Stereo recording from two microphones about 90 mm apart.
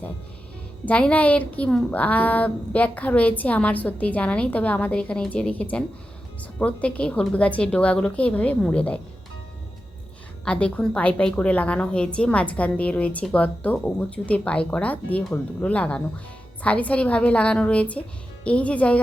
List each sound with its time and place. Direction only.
0.9 s a woman's voice: 15° left (ahead or behind)
10.4 s a woman's voice: 15° left (ahead or behind)